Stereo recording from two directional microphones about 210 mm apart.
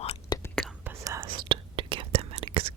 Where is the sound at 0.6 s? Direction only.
Centre (ahead or behind).